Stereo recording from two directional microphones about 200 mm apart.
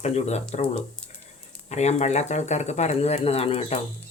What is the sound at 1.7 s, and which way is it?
Speech, 35° left (ahead or behind).